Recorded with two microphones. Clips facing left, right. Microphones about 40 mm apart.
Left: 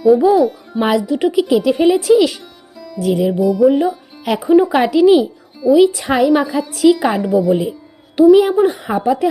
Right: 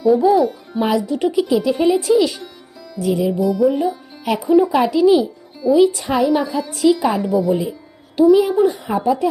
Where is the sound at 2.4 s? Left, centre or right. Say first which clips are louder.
Even; centre.